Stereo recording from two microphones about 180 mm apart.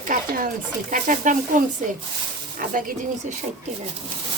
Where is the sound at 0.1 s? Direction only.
50° right (ahead or behind).